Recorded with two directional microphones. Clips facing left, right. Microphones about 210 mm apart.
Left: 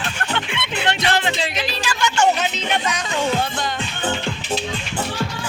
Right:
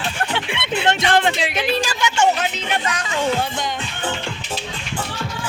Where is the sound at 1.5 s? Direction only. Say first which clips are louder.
Right 5 dB; 55° right (ahead or behind).